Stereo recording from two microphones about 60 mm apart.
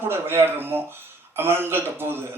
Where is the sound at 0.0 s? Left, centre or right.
Right.